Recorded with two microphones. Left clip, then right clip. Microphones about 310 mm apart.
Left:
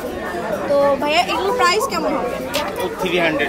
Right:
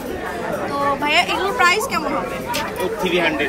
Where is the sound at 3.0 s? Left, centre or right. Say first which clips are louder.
Left 1 dB; left.